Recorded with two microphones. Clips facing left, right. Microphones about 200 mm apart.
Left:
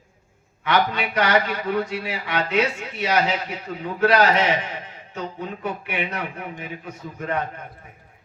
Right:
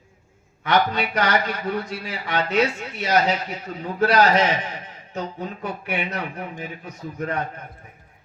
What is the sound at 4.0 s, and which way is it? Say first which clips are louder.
Speech: even; 40° right (ahead or behind).